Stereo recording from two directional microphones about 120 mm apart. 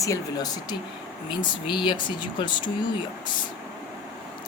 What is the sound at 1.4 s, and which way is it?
Speech, 40° left (ahead or behind).